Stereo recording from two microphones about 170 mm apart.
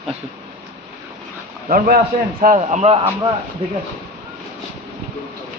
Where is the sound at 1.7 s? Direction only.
55° right (ahead or behind); by 3.0 s 40° right (ahead or behind).